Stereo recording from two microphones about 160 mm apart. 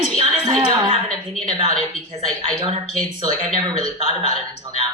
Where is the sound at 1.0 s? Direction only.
5° left (ahead or behind).